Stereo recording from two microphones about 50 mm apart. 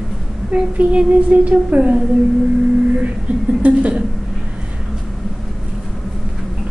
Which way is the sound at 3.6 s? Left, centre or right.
Right.